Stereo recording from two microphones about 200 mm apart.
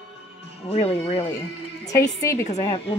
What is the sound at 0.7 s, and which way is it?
Speech, 30° left (ahead or behind).